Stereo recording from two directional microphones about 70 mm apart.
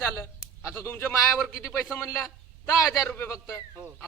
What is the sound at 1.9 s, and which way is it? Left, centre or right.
A man's voice, left.